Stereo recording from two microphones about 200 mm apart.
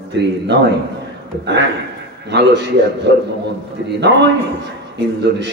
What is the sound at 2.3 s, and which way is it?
A man's voice, 60° right (ahead or behind).